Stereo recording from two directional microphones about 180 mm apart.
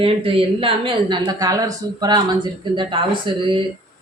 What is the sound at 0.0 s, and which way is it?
A woman's voice, 30° right (ahead or behind).